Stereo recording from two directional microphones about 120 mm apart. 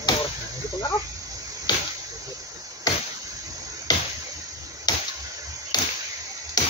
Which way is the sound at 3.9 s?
30° left (ahead or behind).